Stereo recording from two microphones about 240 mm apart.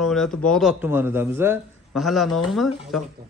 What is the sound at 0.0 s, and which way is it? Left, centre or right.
A man's voice, centre.